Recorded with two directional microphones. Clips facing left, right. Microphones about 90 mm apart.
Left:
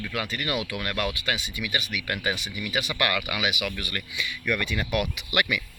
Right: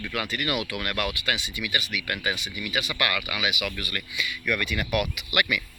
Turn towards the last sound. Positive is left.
turn(degrees=25)  # may be behind; listen again after turning